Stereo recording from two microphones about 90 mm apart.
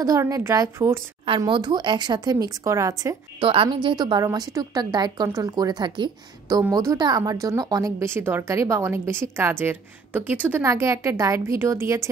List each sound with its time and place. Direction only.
0.0 s a woman's voice: 40° right (ahead or behind)
1.5 s speech: 55° right (ahead or behind)
2.3 s a woman's voice: 35° right (ahead or behind)
3.3 s a woman's voice: 80° right
3.9 s speech: 55° right (ahead or behind)
4.2 s a woman's voice: 40° right (ahead or behind); by 6.1 s 60° right (ahead or behind)
6.7 s a woman's voice: 40° right (ahead or behind)
8.0 s a woman's voice: 30° right (ahead or behind)
10.7 s a woman's voice: 35° right (ahead or behind)